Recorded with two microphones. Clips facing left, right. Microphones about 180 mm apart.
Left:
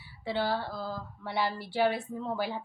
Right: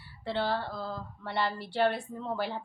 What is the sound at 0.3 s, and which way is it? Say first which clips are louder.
Speech: even; centre (ahead or behind).